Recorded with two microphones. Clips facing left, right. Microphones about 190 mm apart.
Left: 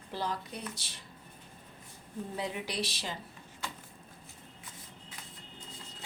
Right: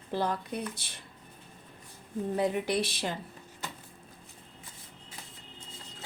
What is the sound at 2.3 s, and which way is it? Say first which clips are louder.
Speech: right 8 dB; 50° right (ahead or behind).